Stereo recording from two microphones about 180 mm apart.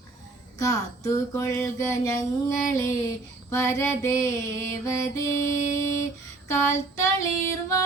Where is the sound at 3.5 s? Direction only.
15° left (ahead or behind).